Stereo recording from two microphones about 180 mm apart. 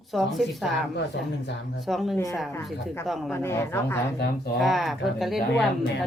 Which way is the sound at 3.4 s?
15° left (ahead or behind).